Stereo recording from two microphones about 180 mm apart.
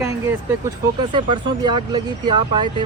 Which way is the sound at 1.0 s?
25° right (ahead or behind).